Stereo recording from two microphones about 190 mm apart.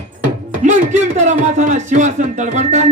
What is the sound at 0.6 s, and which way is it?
Speech, 40° right (ahead or behind).